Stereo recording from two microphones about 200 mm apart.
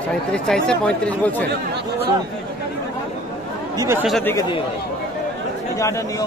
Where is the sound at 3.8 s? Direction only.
10° right (ahead or behind).